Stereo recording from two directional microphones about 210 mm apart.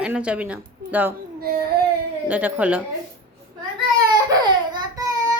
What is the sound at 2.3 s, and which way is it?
Speech, 10° right (ahead or behind).